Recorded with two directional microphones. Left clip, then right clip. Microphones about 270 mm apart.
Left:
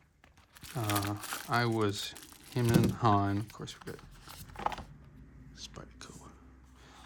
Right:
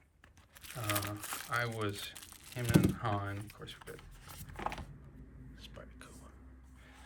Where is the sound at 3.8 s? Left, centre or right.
Centre.